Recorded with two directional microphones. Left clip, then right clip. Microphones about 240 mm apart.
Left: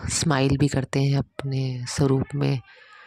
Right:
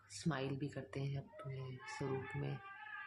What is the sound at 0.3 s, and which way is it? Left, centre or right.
Speech, left.